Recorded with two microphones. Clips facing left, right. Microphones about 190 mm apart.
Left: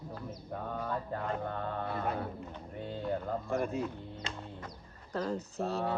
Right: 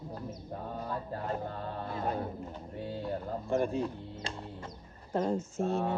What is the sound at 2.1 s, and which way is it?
Speech, 30° right (ahead or behind).